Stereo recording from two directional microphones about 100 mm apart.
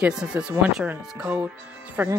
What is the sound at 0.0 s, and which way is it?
Speech, 10° right (ahead or behind).